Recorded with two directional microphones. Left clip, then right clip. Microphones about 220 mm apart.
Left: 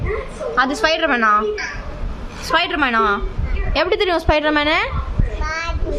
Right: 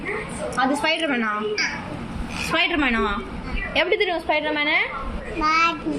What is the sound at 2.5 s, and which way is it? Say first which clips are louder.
A woman's voice: left 4 dB; 30° left (ahead or behind).